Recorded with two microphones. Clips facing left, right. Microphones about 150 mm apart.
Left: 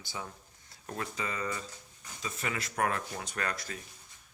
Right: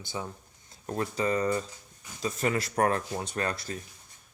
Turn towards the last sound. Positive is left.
turn(degrees=-30)  # may be behind; listen again after turning